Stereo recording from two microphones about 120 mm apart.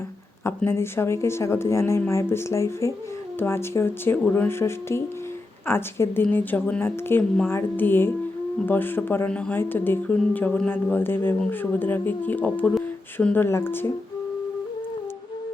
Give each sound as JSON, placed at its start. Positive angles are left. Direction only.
{"t": 0.4, "sound": "speech", "side_deg": 20}